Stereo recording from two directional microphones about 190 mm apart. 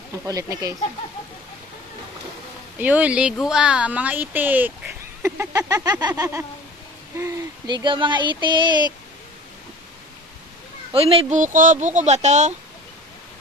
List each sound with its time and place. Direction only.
0.2 s speech: 15° right (ahead or behind)
2.8 s speech: 10° right (ahead or behind); by 8.7 s 25° right (ahead or behind)
10.9 s speech: 30° right (ahead or behind)